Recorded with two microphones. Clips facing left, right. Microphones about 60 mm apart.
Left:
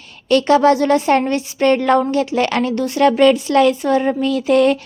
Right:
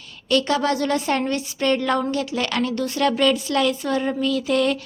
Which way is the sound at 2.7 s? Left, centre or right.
Left.